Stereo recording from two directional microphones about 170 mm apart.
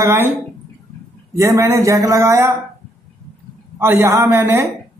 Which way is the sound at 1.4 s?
15° right (ahead or behind).